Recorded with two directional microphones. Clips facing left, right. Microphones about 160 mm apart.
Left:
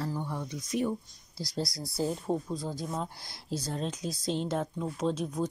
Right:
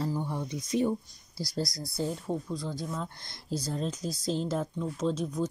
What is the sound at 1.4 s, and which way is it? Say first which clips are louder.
Speech: right 1 dB; 25° left (ahead or behind).